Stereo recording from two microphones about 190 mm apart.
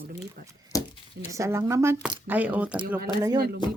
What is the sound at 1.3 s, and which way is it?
Speech, 15° right (ahead or behind).